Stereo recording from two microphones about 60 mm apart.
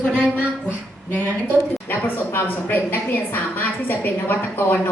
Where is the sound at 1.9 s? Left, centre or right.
Left.